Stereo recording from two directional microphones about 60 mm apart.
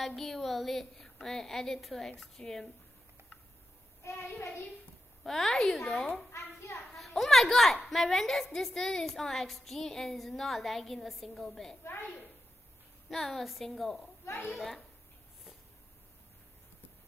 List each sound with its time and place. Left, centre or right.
0.0 s a woman's voice: centre
4.0 s a child's voice: left
5.2 s a woman's voice: centre
6.3 s a sound: left
6.9 s a woman's voice: centre
13.1 s a woman's voice: centre
14.2 s a woman's voice: left
14.5 s a woman's voice: centre